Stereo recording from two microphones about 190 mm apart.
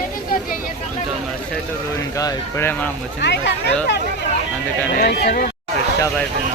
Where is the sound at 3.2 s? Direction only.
65° left (ahead or behind).